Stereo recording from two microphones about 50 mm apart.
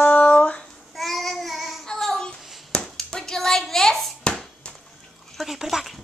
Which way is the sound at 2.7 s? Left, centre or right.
Centre.